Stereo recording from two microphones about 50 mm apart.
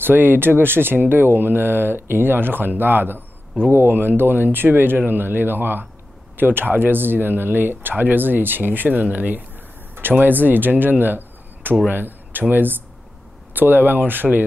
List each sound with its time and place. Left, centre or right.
0.0 s speech: right